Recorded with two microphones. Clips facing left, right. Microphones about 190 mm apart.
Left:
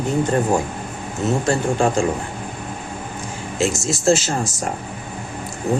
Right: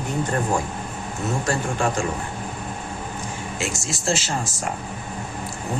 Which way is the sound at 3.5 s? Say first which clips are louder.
Left 10 dB; 35° left (ahead or behind).